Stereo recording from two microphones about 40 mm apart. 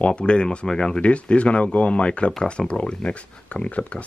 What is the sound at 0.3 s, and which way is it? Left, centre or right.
Speech, left.